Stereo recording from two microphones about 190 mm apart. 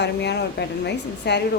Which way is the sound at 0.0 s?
60° left (ahead or behind).